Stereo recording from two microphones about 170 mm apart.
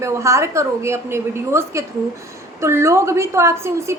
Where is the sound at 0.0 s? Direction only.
15° right (ahead or behind).